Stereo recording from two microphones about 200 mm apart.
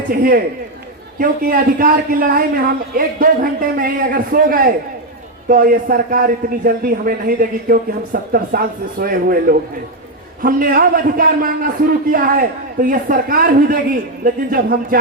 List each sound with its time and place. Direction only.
0.1 s speech: 45° right (ahead or behind)